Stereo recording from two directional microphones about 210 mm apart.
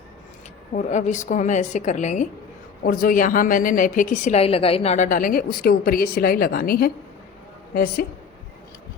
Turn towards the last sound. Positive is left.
turn(degrees=45)  # may be behind; listen again after turning